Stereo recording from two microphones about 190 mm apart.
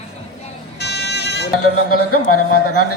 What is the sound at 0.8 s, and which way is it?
Vehicle, 60° left (ahead or behind).